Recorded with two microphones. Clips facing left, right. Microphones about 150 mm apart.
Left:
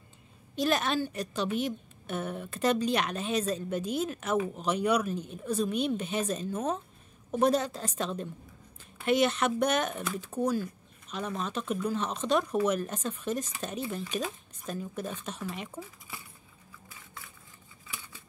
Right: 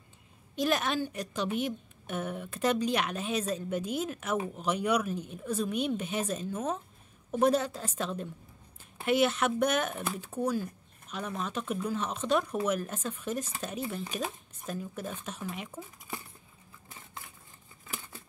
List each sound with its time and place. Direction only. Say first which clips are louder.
0.6 s a woman's voice: left 1 dB; 10° right (ahead or behind)
10.3 s speech: left 2 dB; 10° left (ahead or behind)
10.6 s a woman's voice: left 1 dB; 5° right (ahead or behind)
15.7 s speech: left 2 dB; 10° left (ahead or behind)
17.8 s scissors: right 3 dB; 45° right (ahead or behind)